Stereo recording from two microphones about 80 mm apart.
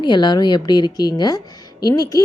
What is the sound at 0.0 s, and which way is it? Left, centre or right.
A woman's voice, left.